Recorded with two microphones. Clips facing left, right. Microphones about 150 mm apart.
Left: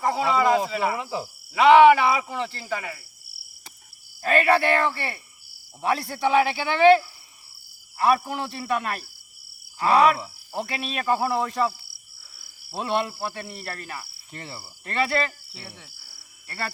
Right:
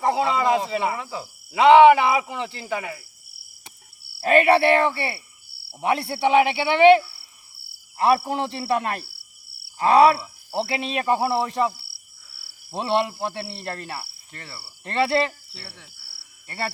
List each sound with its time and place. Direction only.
0.0 s speech: 25° right (ahead or behind)
0.9 s cricket: 15° left (ahead or behind)
1.5 s speech: 25° right (ahead or behind)
4.2 s speech: 25° right (ahead or behind)
7.9 s speech: 30° right (ahead or behind)
12.7 s speech: 25° right (ahead or behind)
14.3 s cricket: 20° left (ahead or behind)
14.8 s speech: 25° right (ahead or behind)
15.5 s cricket: 10° left (ahead or behind)